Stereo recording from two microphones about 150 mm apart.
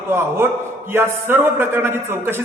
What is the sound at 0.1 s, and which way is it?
A man's voice, 15° right (ahead or behind).